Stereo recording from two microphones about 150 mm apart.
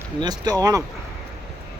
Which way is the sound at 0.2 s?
25° right (ahead or behind).